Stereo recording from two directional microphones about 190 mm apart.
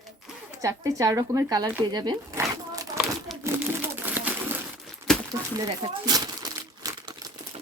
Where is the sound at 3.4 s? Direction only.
15° right (ahead or behind).